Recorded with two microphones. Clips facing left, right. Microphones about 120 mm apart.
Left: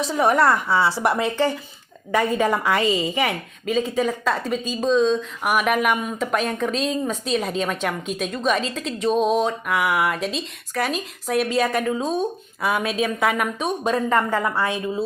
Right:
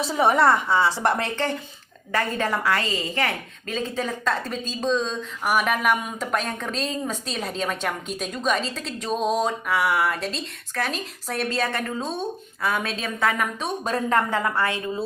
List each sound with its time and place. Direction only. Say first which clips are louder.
0.0 s a woman's voice: left 1 dB; centre (ahead or behind)
14.4 s a woman's voice: left 1 dB; 15° left (ahead or behind)